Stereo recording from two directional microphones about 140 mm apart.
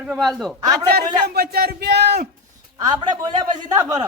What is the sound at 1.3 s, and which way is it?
Speech, 90° right.